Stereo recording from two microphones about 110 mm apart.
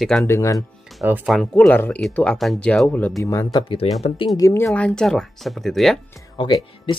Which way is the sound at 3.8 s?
65° left (ahead or behind).